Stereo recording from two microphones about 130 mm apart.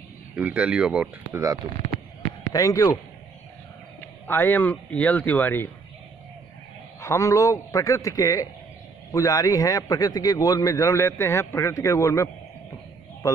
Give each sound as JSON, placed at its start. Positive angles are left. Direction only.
{"t": 0.3, "sound": "speech", "side_deg": -10}
{"t": 1.3, "sound": "speech", "side_deg": -25}
{"t": 2.5, "sound": "a man's voice", "side_deg": 25}
{"t": 4.3, "sound": "speech", "side_deg": 15}
{"t": 7.0, "sound": "a man's voice", "side_deg": 20}